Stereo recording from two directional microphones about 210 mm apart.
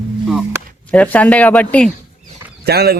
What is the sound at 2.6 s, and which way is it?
Speech, 50° right (ahead or behind).